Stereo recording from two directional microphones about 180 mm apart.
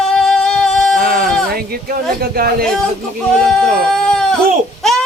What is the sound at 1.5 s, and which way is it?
Speech, 55° right (ahead or behind).